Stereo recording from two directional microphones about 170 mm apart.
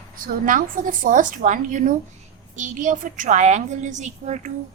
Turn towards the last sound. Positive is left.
turn(degrees=-45)  # may be behind; listen again after turning